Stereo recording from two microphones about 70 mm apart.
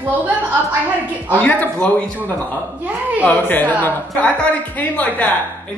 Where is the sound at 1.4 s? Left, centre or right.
Left.